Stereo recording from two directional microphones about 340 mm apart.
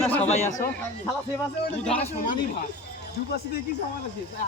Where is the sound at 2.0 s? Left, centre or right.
Left.